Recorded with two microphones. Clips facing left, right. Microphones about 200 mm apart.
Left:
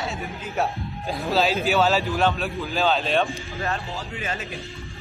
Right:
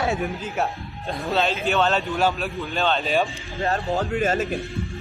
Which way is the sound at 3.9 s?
60° right (ahead or behind).